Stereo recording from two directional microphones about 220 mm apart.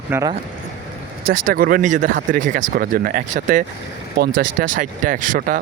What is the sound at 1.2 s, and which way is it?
Speech, 40° right (ahead or behind).